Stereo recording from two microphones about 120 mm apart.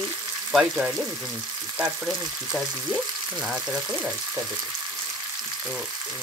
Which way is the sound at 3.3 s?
10° right (ahead or behind).